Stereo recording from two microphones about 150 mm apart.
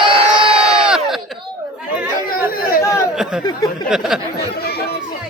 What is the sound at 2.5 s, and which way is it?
Chatter, 80° left.